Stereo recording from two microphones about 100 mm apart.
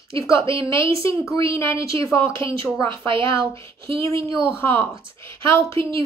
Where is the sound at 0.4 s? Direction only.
60° right (ahead or behind).